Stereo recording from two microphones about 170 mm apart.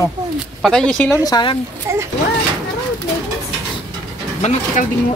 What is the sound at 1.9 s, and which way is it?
Speech, 15° right (ahead or behind).